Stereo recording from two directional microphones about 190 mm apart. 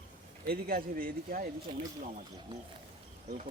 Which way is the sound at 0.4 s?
55° right (ahead or behind).